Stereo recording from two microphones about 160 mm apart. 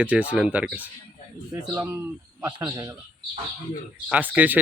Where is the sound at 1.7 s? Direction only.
20° right (ahead or behind).